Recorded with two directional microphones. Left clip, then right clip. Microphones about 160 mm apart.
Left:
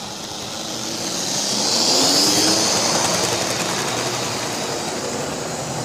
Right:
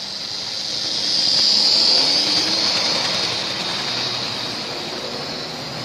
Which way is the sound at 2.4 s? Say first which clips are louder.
Left 1 dB; 50° left (ahead or behind).